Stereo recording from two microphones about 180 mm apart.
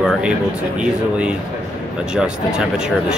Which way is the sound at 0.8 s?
5° right (ahead or behind).